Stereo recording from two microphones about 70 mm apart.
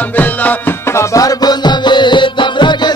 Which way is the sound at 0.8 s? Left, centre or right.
Left.